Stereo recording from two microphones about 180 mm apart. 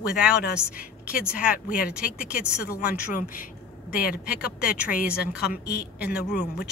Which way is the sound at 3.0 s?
50° left (ahead or behind).